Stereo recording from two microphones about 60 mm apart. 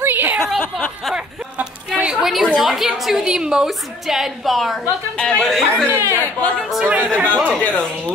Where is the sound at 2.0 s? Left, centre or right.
Centre.